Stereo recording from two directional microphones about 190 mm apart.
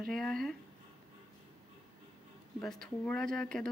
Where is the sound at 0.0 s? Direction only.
5° left (ahead or behind).